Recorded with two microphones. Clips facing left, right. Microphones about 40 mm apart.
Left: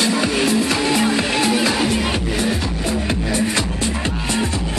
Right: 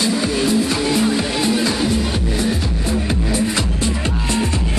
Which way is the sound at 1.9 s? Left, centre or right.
Left.